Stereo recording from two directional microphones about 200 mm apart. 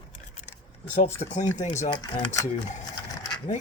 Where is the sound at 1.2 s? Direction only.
35° left (ahead or behind).